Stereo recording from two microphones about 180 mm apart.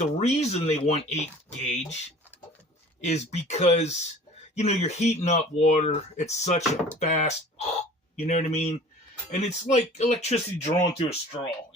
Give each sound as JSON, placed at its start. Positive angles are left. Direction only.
{"t": 0.0, "sound": "speech", "side_deg": 40}
{"t": 6.6, "sound": "speech", "side_deg": 10}
{"t": 7.0, "sound": "speech", "side_deg": 40}